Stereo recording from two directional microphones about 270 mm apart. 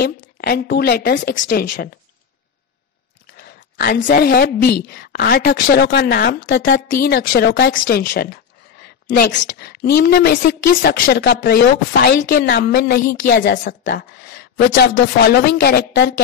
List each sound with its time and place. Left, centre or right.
0.0 s a woman's voice: left
3.3 s a woman's voice: left